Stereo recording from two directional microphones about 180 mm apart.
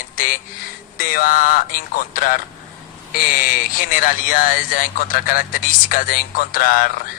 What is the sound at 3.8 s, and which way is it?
Speech, 50° left (ahead or behind).